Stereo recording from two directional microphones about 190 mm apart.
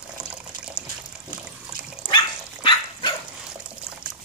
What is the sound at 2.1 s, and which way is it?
Dog, 25° left (ahead or behind).